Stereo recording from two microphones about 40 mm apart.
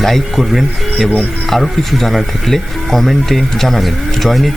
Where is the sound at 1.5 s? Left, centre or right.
Centre.